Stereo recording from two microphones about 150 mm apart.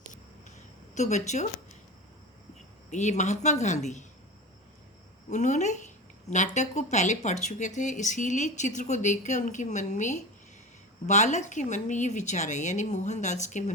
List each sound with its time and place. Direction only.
0.9 s speech: 50° left (ahead or behind)
2.9 s speech: 50° left (ahead or behind)
5.3 s speech: 50° left (ahead or behind)